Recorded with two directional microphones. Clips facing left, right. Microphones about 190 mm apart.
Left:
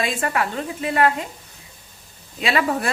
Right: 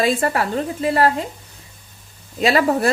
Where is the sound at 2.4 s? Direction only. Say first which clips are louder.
Right 5 dB; 40° right (ahead or behind).